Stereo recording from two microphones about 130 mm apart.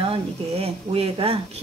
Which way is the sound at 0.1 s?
50° right (ahead or behind).